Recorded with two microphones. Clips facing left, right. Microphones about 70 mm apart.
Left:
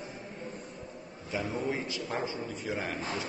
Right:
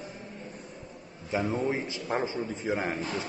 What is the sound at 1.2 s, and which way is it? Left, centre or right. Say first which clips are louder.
A man's voice: right 4 dB; right.